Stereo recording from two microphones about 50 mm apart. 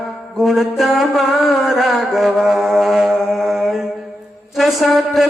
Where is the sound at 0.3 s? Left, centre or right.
Centre.